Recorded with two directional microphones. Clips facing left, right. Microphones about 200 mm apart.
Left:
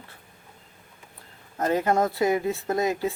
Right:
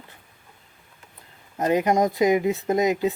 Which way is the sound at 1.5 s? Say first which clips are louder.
Right 2 dB; 15° right (ahead or behind).